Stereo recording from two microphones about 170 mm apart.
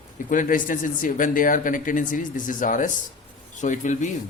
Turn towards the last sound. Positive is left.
turn(degrees=45)  # may be behind; listen again after turning